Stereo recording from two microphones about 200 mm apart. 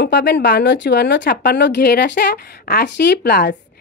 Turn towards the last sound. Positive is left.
turn(degrees=55)  # may be behind; listen again after turning